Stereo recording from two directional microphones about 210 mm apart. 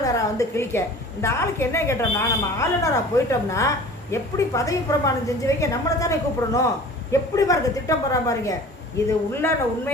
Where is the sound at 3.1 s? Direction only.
15° left (ahead or behind).